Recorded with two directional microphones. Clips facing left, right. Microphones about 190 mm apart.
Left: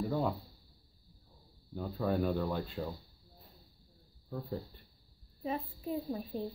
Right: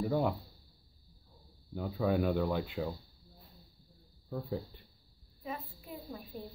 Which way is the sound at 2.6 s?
15° right (ahead or behind).